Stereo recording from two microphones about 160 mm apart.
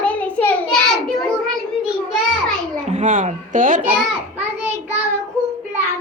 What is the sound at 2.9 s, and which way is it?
Speech, 50° right (ahead or behind).